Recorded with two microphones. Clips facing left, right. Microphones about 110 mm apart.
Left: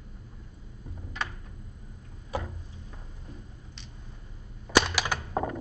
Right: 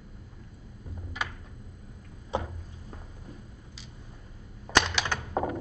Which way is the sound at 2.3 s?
25° right (ahead or behind).